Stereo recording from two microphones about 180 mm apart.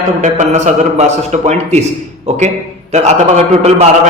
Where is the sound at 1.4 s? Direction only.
40° right (ahead or behind).